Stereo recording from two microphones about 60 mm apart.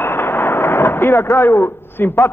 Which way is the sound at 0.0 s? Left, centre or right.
Left.